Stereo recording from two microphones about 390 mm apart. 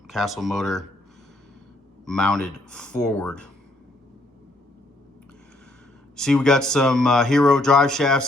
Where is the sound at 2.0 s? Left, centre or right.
Centre.